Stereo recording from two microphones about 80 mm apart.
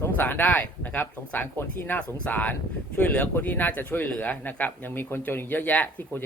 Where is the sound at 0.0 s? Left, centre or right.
Left.